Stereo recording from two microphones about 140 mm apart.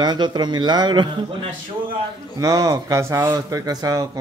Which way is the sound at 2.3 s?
25° right (ahead or behind).